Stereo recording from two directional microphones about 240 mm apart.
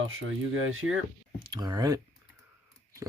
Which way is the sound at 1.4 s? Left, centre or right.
Centre.